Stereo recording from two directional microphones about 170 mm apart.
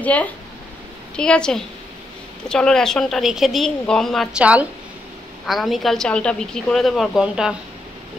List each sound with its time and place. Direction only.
0.0 s speech: 10° left (ahead or behind)